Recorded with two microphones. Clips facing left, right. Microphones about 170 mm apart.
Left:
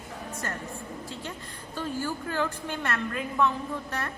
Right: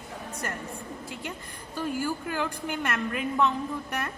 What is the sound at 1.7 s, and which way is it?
A woman's voice, 10° right (ahead or behind).